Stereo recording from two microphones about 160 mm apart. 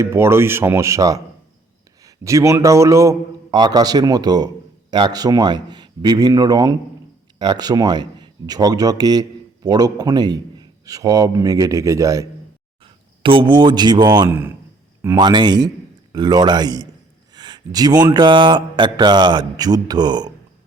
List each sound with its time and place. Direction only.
0.0 s speech: 15° right (ahead or behind)
12.8 s speech: 35° right (ahead or behind)
14.3 s speech: 15° right (ahead or behind)
15.2 s speech: 30° right (ahead or behind)